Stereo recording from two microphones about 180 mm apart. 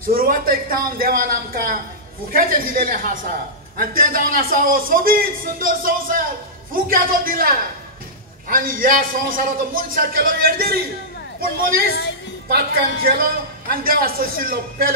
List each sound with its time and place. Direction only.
0.0 s a man's voice: 55° right (ahead or behind)
12.4 s a man's voice: 55° right (ahead or behind)